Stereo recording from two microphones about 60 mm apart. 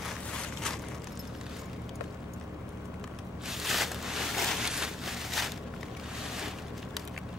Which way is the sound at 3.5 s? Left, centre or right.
Centre.